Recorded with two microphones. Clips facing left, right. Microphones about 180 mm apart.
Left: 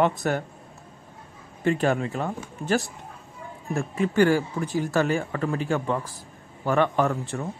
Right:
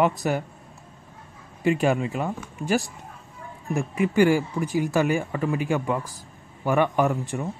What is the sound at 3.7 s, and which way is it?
Speech, 15° right (ahead or behind).